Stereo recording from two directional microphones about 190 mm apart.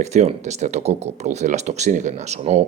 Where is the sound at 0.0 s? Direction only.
35° right (ahead or behind).